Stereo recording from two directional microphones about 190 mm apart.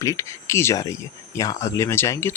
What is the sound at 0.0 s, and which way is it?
Speech, 15° left (ahead or behind).